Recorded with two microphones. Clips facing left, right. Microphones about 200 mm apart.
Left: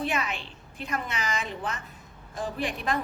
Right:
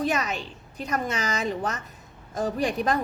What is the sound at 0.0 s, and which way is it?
A woman's voice, 40° right (ahead or behind).